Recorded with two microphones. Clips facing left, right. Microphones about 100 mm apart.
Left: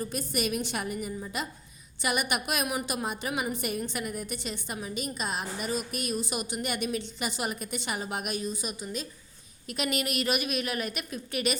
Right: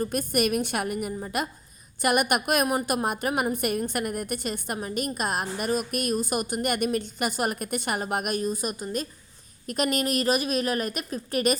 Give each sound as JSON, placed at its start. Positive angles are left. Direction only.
{"t": 0.0, "sound": "a woman's voice", "side_deg": -50}